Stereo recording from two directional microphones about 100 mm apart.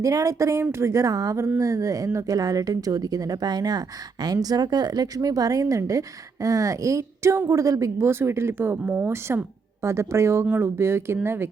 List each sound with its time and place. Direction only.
0.0 s speech: 35° right (ahead or behind)